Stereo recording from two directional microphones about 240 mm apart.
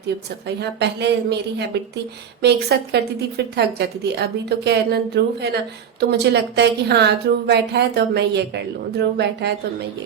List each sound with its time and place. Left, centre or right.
0.4 s a woman's voice: right